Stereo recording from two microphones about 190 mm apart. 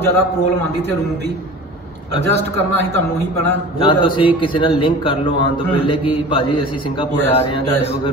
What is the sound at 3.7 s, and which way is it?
A man's voice, 25° left (ahead or behind).